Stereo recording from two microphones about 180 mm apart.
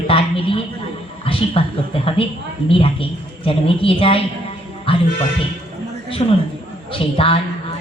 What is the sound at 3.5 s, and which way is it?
Speech, 30° left (ahead or behind).